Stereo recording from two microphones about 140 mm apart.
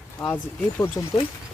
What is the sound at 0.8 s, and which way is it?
Speech, 25° left (ahead or behind).